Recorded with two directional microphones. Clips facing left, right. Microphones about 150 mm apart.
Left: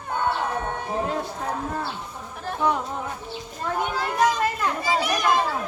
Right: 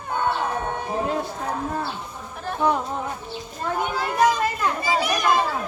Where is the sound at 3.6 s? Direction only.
5° right (ahead or behind).